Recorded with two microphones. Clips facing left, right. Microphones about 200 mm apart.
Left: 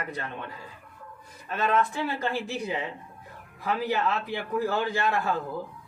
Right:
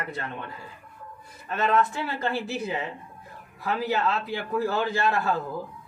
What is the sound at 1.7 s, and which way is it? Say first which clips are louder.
Speech: even; 15° left (ahead or behind).